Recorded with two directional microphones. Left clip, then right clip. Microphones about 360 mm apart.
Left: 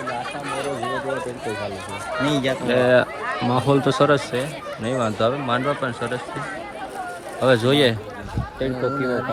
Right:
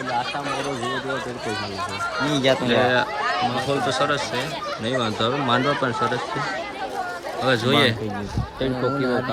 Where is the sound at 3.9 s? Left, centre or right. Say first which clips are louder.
Left 4 dB; centre.